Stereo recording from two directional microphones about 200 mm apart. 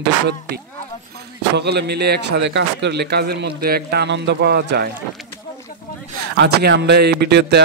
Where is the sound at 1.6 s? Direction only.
55° right (ahead or behind).